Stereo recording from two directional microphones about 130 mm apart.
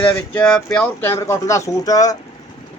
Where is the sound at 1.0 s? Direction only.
20° left (ahead or behind).